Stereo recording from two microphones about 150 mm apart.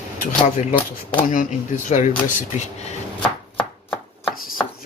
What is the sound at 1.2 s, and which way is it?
Speech, 60° left (ahead or behind).